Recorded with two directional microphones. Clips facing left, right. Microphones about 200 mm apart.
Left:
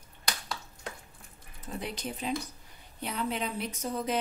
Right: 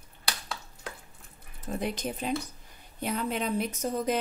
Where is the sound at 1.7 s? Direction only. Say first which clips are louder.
Right 5 dB; 45° right (ahead or behind).